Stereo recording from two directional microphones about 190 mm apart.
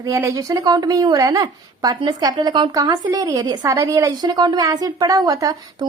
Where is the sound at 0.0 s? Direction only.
15° right (ahead or behind).